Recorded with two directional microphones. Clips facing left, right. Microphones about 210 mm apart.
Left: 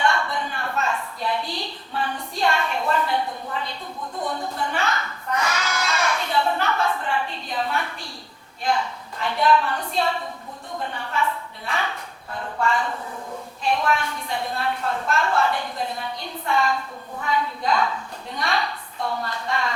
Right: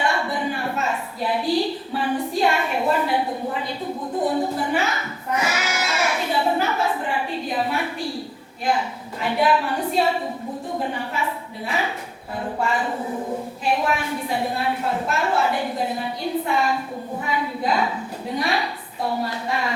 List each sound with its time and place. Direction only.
0.0 s a sound: 5° right (ahead or behind)
2.4 s a woman's voice: 10° right (ahead or behind)
4.5 s child singing: 5° right (ahead or behind)
7.0 s a sound: 5° right (ahead or behind)
8.6 s a woman's voice: 5° right (ahead or behind)
12.9 s a woman's voice: 20° right (ahead or behind)
13.7 s a woman's voice: 5° right (ahead or behind)